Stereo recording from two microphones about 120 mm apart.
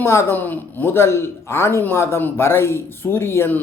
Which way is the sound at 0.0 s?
20° left (ahead or behind).